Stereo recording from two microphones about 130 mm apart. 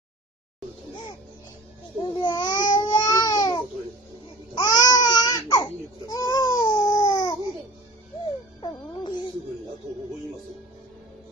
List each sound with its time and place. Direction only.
2.0 s babbling: 35° left (ahead or behind)
4.6 s baby cry: 30° left (ahead or behind)
8.5 s music: 35° left (ahead or behind)